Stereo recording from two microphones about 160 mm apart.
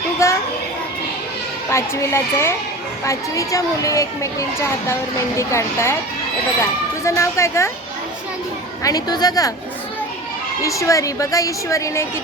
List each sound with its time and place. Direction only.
0.2 s children playing: 20° left (ahead or behind)
1.7 s speech: 15° left (ahead or behind)
8.8 s speech: 25° left (ahead or behind)
10.6 s speech: 20° left (ahead or behind)